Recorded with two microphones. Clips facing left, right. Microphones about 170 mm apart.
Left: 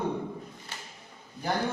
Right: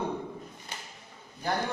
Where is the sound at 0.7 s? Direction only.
15° right (ahead or behind).